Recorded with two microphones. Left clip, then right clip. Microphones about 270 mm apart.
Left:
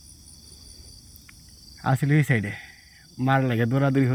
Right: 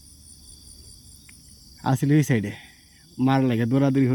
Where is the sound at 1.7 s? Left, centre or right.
Centre.